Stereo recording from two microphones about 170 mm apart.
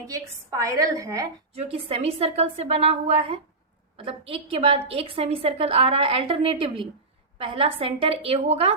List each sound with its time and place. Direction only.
0.1 s a woman's voice: 20° right (ahead or behind)
1.5 s a woman's voice: 35° right (ahead or behind)